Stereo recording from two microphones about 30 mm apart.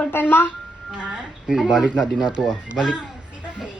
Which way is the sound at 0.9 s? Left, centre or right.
Right.